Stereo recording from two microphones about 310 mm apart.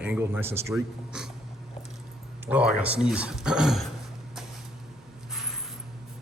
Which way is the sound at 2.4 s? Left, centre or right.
Centre.